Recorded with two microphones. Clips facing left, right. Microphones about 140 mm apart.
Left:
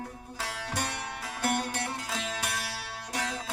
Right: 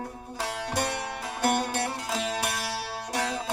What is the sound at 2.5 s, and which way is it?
Music, 30° right (ahead or behind).